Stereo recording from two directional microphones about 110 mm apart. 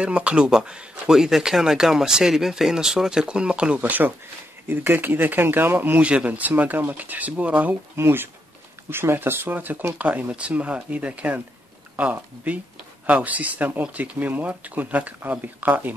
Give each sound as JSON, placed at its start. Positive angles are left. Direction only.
{"t": 0.0, "sound": "speech", "side_deg": -10}